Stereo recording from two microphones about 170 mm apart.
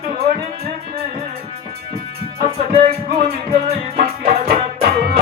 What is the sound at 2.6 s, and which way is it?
Music, 35° right (ahead or behind).